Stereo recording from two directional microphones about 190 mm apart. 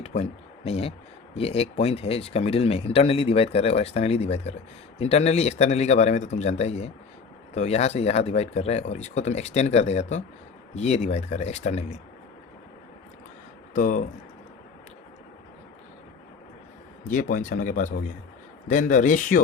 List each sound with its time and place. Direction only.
0.0 s speech: 35° left (ahead or behind)
13.7 s speech: 45° left (ahead or behind)
17.1 s speech: 45° left (ahead or behind)